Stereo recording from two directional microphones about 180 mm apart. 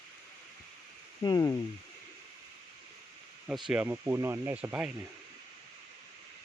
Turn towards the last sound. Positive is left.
turn(degrees=-5)  # may be behind; listen again after turning